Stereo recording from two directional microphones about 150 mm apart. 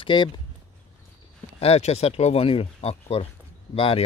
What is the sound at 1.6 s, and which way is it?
Speech, 45° left (ahead or behind).